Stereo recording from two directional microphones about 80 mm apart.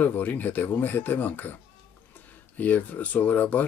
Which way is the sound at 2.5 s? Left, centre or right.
Left.